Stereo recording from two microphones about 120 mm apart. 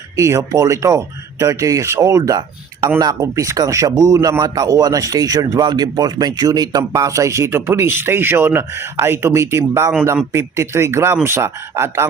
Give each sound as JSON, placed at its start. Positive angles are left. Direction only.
{"t": 0.2, "sound": "speech", "side_deg": -25}